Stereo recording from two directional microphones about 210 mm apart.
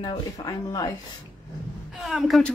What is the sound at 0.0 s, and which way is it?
Speech, 20° left (ahead or behind).